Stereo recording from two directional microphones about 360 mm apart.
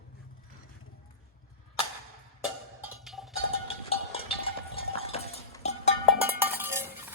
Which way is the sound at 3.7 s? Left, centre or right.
Centre.